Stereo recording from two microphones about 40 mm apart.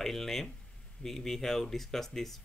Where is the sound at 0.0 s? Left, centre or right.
Centre.